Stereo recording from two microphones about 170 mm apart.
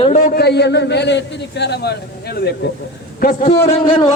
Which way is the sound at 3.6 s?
30° left (ahead or behind).